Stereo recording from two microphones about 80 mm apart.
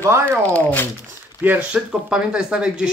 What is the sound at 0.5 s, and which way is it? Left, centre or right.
Speech, left.